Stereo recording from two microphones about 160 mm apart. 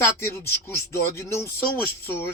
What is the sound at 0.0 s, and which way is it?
Speech, 15° left (ahead or behind).